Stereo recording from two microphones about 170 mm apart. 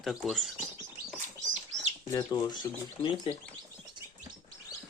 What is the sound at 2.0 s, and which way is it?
Speech, 25° left (ahead or behind).